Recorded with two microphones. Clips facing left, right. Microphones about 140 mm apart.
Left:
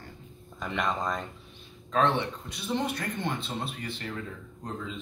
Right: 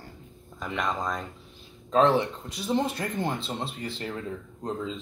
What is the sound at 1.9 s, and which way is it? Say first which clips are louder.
Speech: right 4 dB; 25° right (ahead or behind).